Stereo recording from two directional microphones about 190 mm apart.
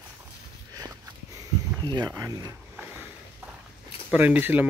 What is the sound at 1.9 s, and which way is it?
Speech, 20° right (ahead or behind).